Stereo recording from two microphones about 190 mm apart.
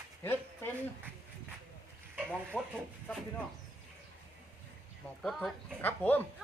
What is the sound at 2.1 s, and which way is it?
Frying, 10° right (ahead or behind).